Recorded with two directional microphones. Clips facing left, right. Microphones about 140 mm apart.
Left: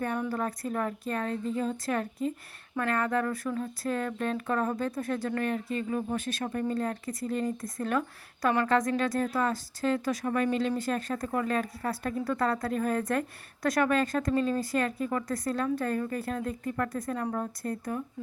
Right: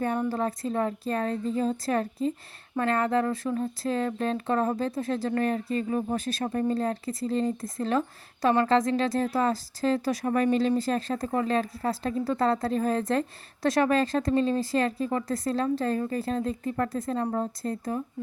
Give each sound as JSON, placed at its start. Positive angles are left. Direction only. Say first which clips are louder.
{"t": 0.0, "sound": "a woman's voice", "louder": "right 4 dB", "side_deg": -30}